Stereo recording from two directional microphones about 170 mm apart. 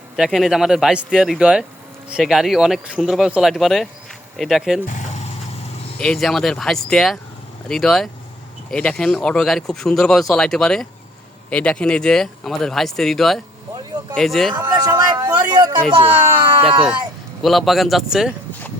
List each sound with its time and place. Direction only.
0.2 s speech: centre (ahead or behind)
4.9 s a sound: 45° left (ahead or behind)
6.0 s speech: 5° left (ahead or behind)
14.5 s speech: 25° right (ahead or behind)
17.4 s speech: centre (ahead or behind)